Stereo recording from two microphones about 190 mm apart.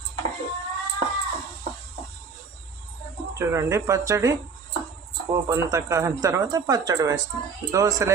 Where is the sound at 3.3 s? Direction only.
15° right (ahead or behind).